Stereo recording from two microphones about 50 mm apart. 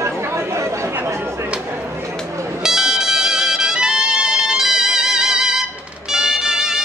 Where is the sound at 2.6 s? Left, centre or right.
Centre.